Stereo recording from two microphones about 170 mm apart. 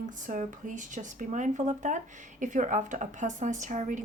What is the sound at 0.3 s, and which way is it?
A woman's voice, 50° right (ahead or behind).